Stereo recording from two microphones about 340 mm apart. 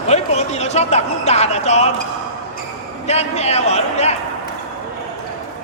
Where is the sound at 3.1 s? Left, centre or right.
Centre.